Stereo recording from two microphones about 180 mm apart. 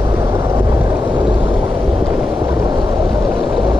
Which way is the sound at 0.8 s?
25° right (ahead or behind).